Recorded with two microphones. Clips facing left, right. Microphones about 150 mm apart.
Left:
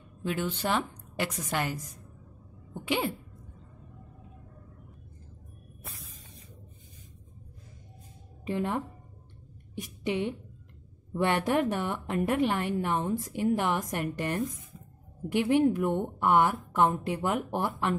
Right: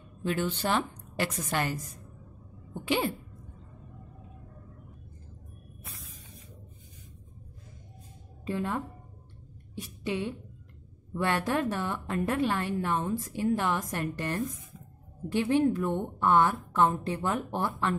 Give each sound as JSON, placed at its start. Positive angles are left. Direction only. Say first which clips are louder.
{"t": 0.2, "sound": "a woman's voice", "louder": "right 1 dB", "side_deg": 10}
{"t": 2.7, "sound": "sneeze", "louder": "right 1 dB", "side_deg": 10}
{"t": 8.5, "sound": "a woman's voice", "louder": "left 1 dB", "side_deg": 20}